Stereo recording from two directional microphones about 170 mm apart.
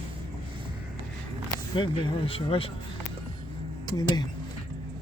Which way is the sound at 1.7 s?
30° left (ahead or behind).